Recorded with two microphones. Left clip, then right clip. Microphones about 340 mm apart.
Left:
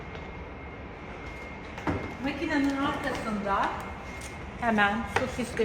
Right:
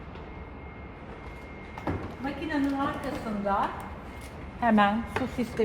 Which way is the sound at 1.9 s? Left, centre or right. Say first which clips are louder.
Left 2 dB; centre.